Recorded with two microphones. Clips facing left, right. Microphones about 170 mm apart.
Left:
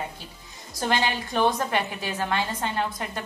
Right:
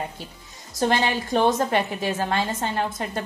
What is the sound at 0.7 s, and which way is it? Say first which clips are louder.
A woman's voice: right 4 dB; 30° right (ahead or behind).